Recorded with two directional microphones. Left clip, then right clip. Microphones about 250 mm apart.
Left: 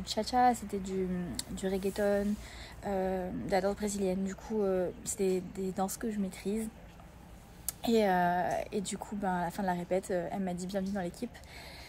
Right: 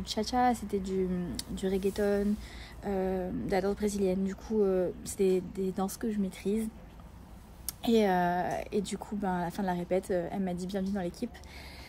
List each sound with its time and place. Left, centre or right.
0.0 s a woman's voice: centre